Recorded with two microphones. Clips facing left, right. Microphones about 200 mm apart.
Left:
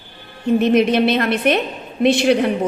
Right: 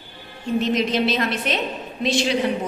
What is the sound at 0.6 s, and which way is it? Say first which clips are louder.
A woman's voice: left 6 dB; 60° left (ahead or behind).